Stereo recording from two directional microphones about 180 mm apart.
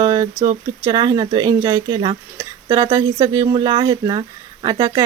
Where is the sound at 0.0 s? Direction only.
20° right (ahead or behind).